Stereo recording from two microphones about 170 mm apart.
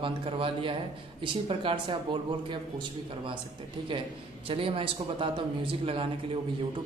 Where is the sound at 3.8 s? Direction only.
30° right (ahead or behind).